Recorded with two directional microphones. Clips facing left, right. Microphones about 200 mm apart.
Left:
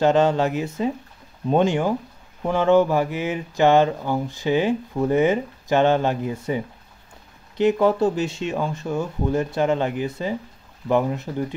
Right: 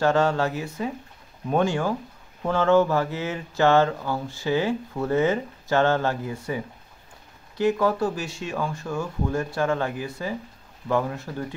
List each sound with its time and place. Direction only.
0.0 s speech: 20° left (ahead or behind)